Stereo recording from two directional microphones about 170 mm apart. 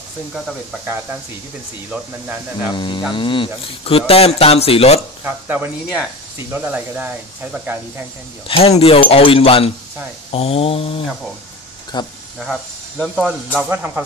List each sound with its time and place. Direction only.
2.7 s speech: 30° left (ahead or behind)
5.2 s speech: 10° right (ahead or behind)
8.5 s speech: 35° left (ahead or behind)
13.0 s speech: centre (ahead or behind)